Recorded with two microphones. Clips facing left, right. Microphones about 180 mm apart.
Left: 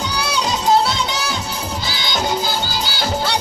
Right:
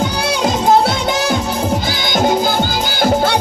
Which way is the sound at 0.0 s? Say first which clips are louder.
Right 6 dB; 50° right (ahead or behind).